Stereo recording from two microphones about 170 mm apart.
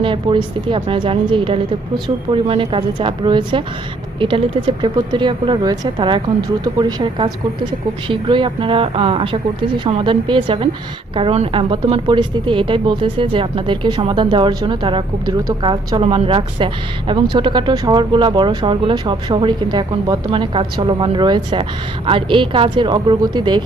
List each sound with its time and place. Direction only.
0.0 s speech: 30° right (ahead or behind)